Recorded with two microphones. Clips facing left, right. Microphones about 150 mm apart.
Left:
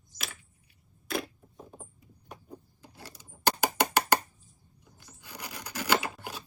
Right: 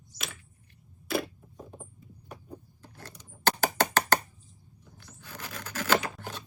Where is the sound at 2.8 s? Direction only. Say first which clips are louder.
Right 1 dB; 10° left (ahead or behind).